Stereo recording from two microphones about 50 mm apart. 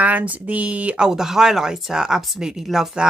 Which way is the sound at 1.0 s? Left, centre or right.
Centre.